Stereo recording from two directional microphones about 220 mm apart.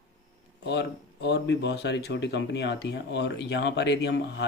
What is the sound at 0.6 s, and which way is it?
Speech, 50° left (ahead or behind).